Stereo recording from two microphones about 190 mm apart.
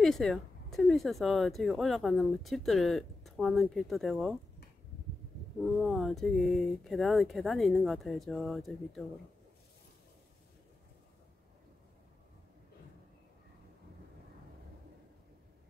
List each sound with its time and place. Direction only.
0.0 s speech: 5° left (ahead or behind)
5.6 s speech: centre (ahead or behind)